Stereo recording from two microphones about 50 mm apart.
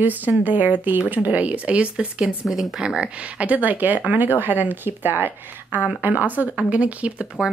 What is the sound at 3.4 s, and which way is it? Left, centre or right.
Speech, right.